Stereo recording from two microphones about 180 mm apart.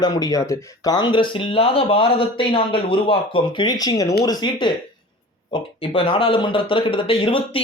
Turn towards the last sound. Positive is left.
turn(degrees=30)  # may be behind; listen again after turning